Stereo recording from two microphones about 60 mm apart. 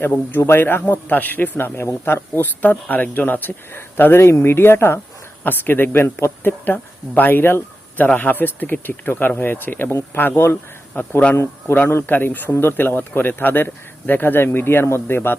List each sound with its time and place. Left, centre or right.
0.3 s speech: left
12.0 s speech: left